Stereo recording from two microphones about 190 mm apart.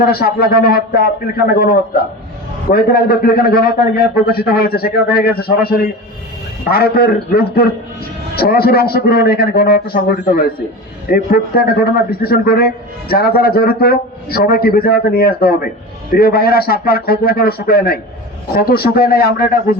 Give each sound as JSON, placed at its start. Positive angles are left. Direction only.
{"t": 0.0, "sound": "a man's voice", "side_deg": 55}